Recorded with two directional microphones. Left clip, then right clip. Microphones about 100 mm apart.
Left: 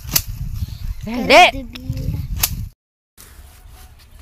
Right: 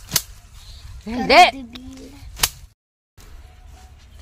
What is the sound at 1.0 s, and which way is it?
Speech, 10° left (ahead or behind).